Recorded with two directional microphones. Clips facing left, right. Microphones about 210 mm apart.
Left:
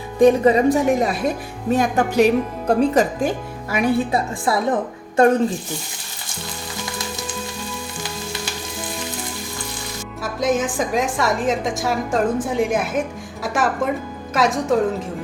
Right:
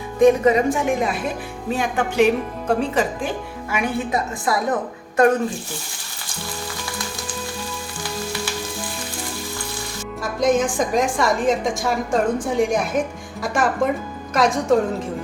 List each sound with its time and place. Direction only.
0.2 s a woman's voice: 30° left (ahead or behind)
10.2 s a woman's voice: 5° left (ahead or behind)